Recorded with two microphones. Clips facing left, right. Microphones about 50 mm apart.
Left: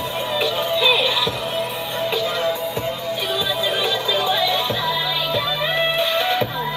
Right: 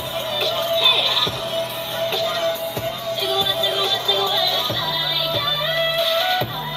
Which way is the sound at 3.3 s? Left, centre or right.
Centre.